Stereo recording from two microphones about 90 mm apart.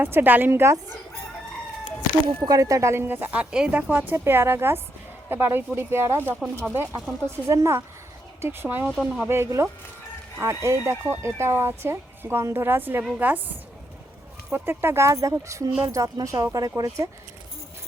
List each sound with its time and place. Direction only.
0.0 s speech: 20° right (ahead or behind)
2.4 s speech: 40° right (ahead or behind)
7.4 s speech: 35° right (ahead or behind)
8.9 s speech: 5° right (ahead or behind)
9.2 s speech: 25° right (ahead or behind)
14.5 s speech: 25° right (ahead or behind)